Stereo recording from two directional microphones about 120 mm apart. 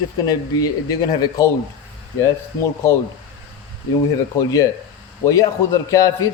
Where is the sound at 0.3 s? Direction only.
30° left (ahead or behind).